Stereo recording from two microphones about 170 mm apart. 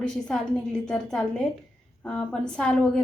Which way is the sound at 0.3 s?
5° left (ahead or behind).